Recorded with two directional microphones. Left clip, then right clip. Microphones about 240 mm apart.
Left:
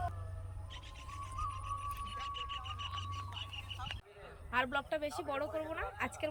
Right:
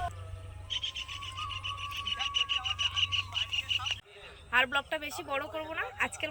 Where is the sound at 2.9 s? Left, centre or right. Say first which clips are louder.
Right 13 dB; left.